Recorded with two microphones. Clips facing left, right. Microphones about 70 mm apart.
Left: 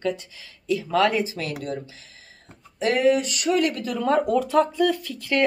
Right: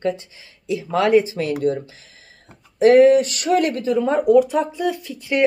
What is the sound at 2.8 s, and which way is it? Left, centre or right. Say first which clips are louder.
Speech: right 9 dB; right.